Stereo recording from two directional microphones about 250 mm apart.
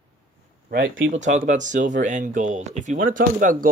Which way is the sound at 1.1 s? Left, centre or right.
Right.